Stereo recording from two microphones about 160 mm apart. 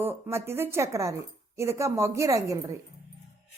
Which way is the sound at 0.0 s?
15° right (ahead or behind).